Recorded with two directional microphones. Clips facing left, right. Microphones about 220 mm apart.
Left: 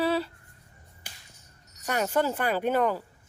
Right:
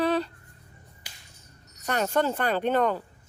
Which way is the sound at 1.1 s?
55° left (ahead or behind).